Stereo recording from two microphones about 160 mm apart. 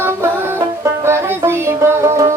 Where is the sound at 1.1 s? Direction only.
15° right (ahead or behind).